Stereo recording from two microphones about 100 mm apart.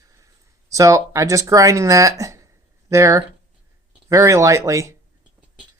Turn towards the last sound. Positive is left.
turn(degrees=-30)  # may be behind; listen again after turning